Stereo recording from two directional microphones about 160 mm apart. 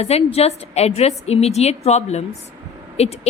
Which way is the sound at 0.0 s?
40° left (ahead or behind).